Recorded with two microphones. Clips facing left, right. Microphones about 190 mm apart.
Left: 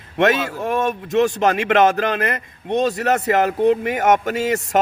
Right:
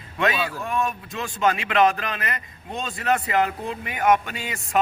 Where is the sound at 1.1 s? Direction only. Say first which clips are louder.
Left 15 dB; 75° left (ahead or behind).